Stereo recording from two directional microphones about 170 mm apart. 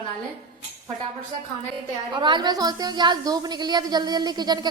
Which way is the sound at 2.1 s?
25° right (ahead or behind).